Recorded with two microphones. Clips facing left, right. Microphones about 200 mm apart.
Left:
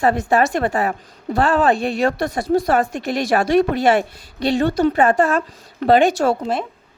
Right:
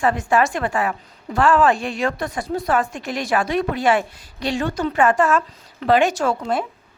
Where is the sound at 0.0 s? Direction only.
35° left (ahead or behind).